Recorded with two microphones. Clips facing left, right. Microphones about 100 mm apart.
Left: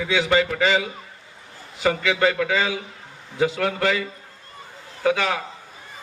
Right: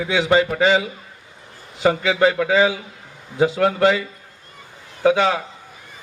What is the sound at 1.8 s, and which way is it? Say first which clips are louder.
A man's voice: right 3 dB; 20° right (ahead or behind).